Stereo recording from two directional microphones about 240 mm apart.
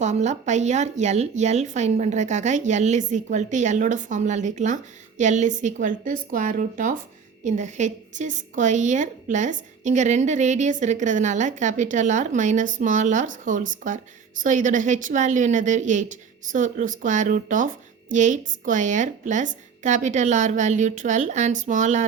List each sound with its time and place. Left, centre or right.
0.0 s a woman's voice: right